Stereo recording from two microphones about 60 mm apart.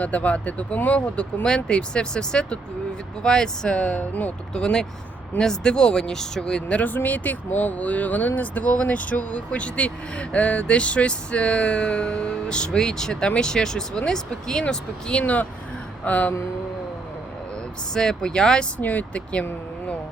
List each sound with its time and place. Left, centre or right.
0.0 s speech: left
4.5 s speech: centre
15.2 s speech: left
17.9 s speech: centre
18.8 s speech: left